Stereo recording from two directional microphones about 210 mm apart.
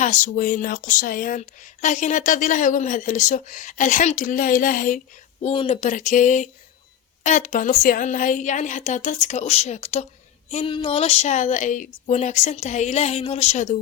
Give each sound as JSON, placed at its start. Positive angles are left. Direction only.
{"t": 0.0, "sound": "speech", "side_deg": 35}
{"t": 5.4, "sound": "speech", "side_deg": 30}